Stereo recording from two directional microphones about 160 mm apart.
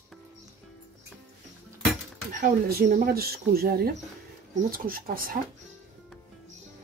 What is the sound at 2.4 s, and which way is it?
Speech, 70° right (ahead or behind).